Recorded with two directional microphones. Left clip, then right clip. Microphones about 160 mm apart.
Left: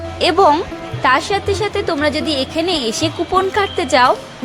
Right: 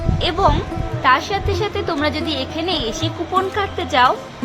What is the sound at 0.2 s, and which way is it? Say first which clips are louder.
Speech: left 6 dB; 45° left (ahead or behind).